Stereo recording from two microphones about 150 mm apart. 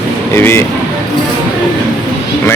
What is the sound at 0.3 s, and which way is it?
Speech, 15° left (ahead or behind).